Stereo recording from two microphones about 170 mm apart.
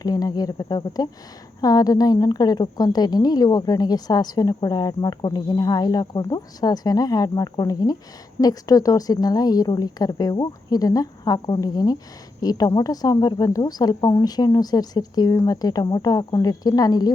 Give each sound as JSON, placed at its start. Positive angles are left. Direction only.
{"t": 0.0, "sound": "a woman's voice", "side_deg": 20}